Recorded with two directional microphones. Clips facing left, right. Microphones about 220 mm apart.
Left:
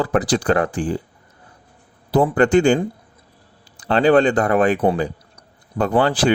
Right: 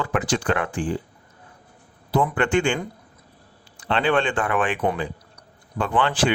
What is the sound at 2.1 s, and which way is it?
Speech, 40° left (ahead or behind).